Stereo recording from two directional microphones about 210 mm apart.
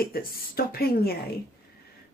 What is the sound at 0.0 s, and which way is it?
A woman's voice, 45° left (ahead or behind).